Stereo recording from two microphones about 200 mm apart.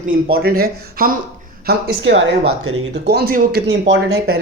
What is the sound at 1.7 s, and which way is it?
Speech, 65° right (ahead or behind).